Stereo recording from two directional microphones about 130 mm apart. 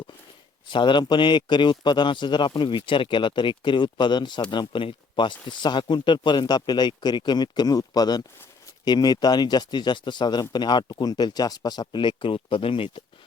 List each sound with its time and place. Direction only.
0.7 s a man's voice: 40° left (ahead or behind)